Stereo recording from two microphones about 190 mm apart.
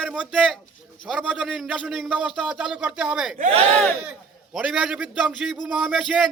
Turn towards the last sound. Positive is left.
turn(degrees=0)  # may be behind; listen again after turning